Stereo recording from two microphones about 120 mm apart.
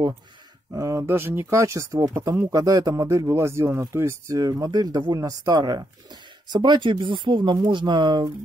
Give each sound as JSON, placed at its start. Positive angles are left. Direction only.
{"t": 0.7, "sound": "speech", "side_deg": -25}